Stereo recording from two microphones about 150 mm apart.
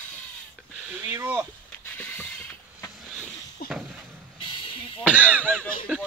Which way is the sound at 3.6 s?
80° left.